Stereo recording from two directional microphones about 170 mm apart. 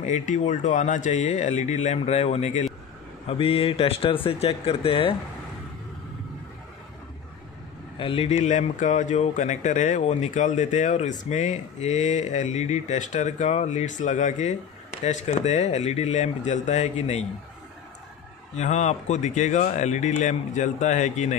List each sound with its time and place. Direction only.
0.0 s speech: 45° left (ahead or behind)
8.0 s speech: 35° left (ahead or behind)
18.6 s speech: 45° left (ahead or behind)